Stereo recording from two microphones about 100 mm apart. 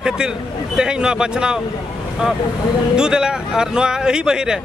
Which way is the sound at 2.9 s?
10° right (ahead or behind).